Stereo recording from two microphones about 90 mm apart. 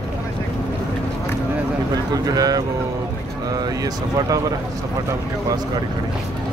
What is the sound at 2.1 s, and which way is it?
Speech, 45° right (ahead or behind).